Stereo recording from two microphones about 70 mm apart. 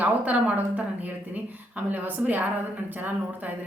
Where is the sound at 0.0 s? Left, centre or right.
Right.